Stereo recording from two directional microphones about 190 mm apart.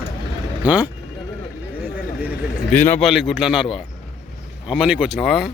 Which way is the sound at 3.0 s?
Centre (ahead or behind).